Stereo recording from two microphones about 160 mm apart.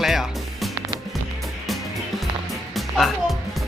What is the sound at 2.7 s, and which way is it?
Music, centre (ahead or behind).